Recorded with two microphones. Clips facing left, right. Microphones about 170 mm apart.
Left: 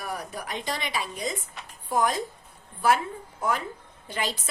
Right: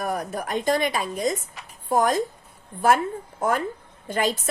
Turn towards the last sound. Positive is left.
turn(degrees=-50)  # may be behind; listen again after turning